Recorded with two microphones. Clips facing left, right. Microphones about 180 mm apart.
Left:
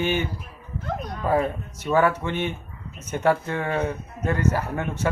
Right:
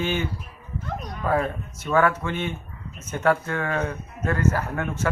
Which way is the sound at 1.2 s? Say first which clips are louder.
Left 1 dB; 15° left (ahead or behind).